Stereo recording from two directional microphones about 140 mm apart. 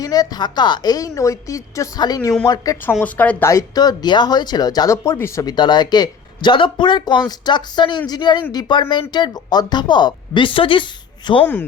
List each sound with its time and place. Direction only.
0.0 s speech: 25° left (ahead or behind)
3.0 s speech: 10° left (ahead or behind); by 11.4 s 35° left (ahead or behind)